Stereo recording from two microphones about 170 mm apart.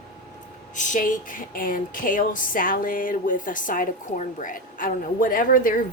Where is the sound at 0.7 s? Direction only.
50° left (ahead or behind).